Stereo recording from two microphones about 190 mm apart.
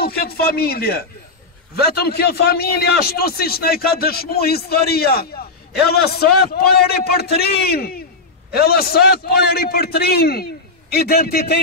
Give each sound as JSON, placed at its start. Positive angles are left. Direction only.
{"t": 0.0, "sound": "a man's voice", "side_deg": 55}